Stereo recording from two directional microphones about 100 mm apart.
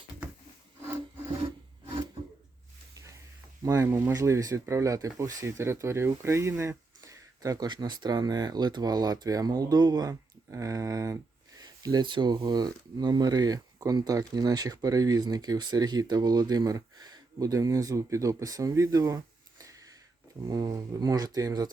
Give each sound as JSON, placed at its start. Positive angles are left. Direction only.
{"t": 3.6, "sound": "speech", "side_deg": -30}
{"t": 3.9, "sound": "speech", "side_deg": -20}
{"t": 4.2, "sound": "speech", "side_deg": -35}
{"t": 12.0, "sound": "speech", "side_deg": -50}
{"t": 18.7, "sound": "a sound", "side_deg": -35}
{"t": 20.5, "sound": "speech", "side_deg": -40}